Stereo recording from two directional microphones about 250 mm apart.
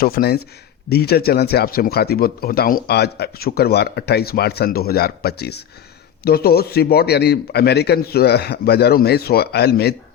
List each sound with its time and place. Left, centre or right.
0.0 s speech: left